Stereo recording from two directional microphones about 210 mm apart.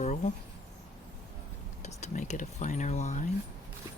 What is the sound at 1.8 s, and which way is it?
Speech, 35° left (ahead or behind).